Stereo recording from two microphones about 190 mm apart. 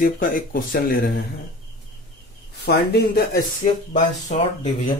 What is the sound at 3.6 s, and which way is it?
Speech, 35° left (ahead or behind).